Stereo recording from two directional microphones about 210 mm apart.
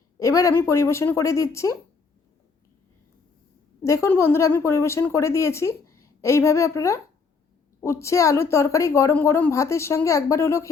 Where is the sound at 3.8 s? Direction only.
15° left (ahead or behind).